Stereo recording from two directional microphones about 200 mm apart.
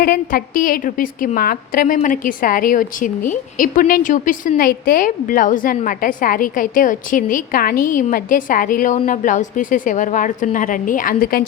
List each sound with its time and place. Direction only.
0.0 s a woman's voice: 45° left (ahead or behind)